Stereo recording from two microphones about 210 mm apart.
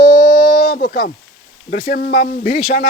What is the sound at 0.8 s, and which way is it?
Speech, 45° left (ahead or behind).